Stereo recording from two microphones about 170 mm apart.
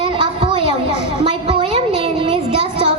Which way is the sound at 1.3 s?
30° right (ahead or behind).